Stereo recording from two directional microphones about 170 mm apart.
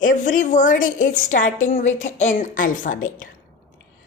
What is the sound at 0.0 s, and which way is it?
Speech, 50° left (ahead or behind).